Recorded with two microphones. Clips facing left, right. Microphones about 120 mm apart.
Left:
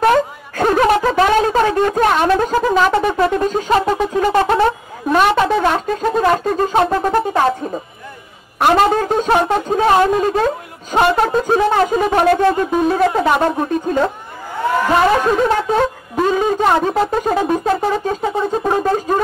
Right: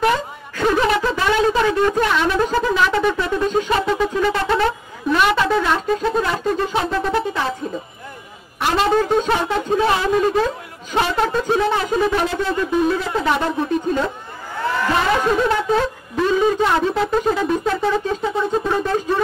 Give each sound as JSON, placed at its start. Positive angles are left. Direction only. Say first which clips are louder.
{"t": 0.0, "sound": "speech", "louder": "left 5 dB", "side_deg": 45}
{"t": 8.5, "sound": "speech", "louder": "left 4 dB", "side_deg": 50}
{"t": 15.5, "sound": "speech", "louder": "left 3 dB", "side_deg": 45}